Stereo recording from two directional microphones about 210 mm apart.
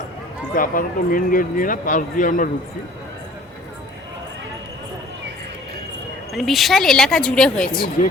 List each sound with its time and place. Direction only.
0.5 s speech: 40° left (ahead or behind)
6.3 s speech: centre (ahead or behind)